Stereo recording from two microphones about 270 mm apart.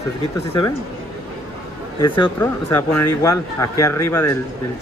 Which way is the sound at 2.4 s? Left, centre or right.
Centre.